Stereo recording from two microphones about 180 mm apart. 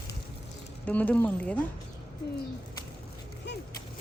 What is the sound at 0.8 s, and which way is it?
Speech, 10° left (ahead or behind).